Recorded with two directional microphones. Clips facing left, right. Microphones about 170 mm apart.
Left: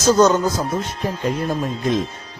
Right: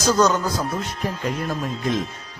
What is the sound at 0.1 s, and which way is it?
Speech, 25° left (ahead or behind).